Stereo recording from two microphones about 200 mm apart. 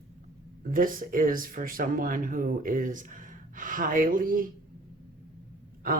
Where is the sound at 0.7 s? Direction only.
45° right (ahead or behind).